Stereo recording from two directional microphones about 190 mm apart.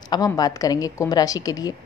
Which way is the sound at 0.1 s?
20° left (ahead or behind).